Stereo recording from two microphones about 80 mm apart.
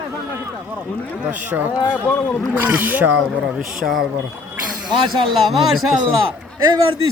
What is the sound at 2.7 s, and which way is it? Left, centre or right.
Speech, right.